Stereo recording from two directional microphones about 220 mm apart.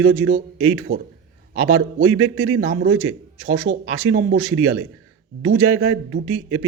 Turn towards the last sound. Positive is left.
turn(degrees=-65)  # may be behind; listen again after turning